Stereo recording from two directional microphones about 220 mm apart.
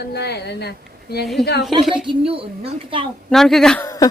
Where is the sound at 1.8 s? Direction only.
Centre (ahead or behind).